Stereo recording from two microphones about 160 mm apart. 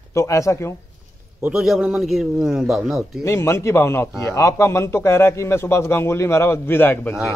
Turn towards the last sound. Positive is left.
turn(degrees=15)  # may be behind; listen again after turning